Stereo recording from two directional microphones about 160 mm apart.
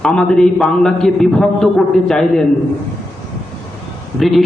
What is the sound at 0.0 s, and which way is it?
A man's voice, 5° left (ahead or behind).